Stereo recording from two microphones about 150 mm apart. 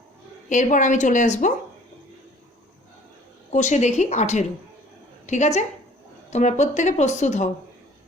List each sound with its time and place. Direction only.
0.4 s a woman's voice: 55° left (ahead or behind)
3.5 s a woman's voice: 55° left (ahead or behind)